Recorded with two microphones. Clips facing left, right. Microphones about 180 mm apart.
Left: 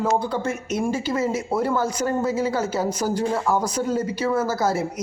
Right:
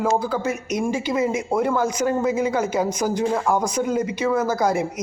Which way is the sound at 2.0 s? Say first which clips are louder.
Right 1 dB; 15° right (ahead or behind).